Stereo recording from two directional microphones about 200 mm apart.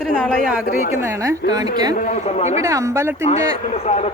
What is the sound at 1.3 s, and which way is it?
Speech, 20° right (ahead or behind).